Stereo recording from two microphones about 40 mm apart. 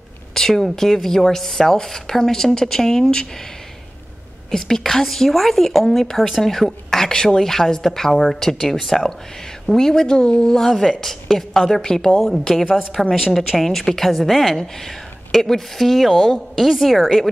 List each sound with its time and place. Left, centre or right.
0.3 s a sound: centre
0.7 s a woman's voice: centre
4.5 s a woman's voice: centre